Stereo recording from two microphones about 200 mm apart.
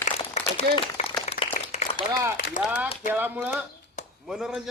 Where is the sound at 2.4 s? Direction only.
45° left (ahead or behind).